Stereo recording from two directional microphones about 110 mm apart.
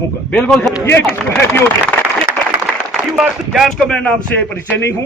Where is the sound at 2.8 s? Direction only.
5° right (ahead or behind).